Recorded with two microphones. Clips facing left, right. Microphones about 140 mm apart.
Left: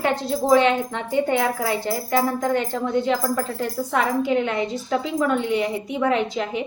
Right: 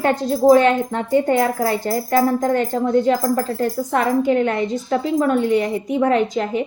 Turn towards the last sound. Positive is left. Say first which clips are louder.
# right 4 dB
turn(degrees=-45)  # may be behind; listen again after turning